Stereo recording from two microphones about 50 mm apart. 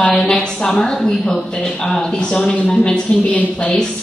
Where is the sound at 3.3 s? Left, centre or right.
Left.